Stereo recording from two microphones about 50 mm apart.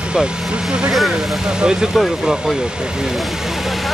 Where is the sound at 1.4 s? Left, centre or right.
Centre.